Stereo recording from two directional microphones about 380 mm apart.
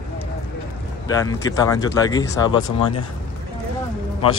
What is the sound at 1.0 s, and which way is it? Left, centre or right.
Speech, centre.